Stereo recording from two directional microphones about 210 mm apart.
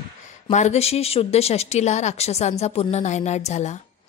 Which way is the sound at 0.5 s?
30° left (ahead or behind).